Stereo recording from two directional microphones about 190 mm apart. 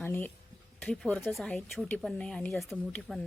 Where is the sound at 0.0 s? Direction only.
10° left (ahead or behind).